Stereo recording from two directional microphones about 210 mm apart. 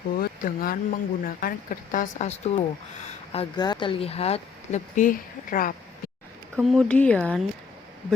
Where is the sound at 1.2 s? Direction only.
45° left (ahead or behind).